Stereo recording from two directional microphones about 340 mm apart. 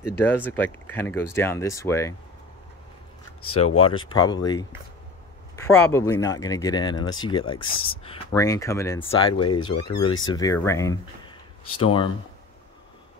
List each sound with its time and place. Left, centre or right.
0.0 s speech: centre
3.5 s speech: centre
9.8 s speech: left
10.0 s speech: centre